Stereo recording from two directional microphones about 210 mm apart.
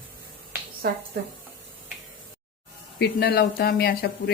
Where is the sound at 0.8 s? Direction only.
50° right (ahead or behind).